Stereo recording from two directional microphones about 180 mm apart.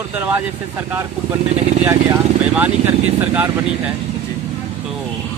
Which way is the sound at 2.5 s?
10° right (ahead or behind).